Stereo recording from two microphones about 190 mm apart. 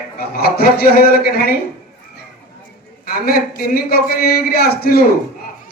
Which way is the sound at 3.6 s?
50° left (ahead or behind).